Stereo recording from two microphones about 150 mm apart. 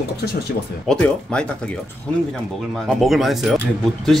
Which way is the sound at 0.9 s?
5° left (ahead or behind).